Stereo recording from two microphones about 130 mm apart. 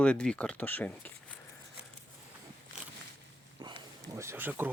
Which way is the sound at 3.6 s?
35° right (ahead or behind).